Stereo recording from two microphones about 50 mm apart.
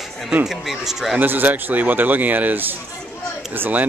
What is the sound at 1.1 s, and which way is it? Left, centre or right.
Speech, right.